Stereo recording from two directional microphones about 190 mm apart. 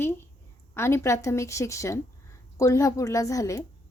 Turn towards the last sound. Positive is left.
turn(degrees=15)  # may be behind; listen again after turning